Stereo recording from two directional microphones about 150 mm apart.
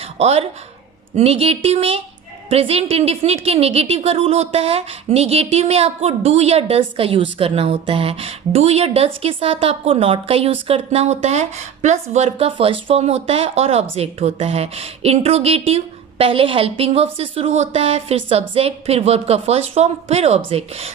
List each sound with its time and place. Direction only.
0.2 s a woman's voice: 45° right (ahead or behind)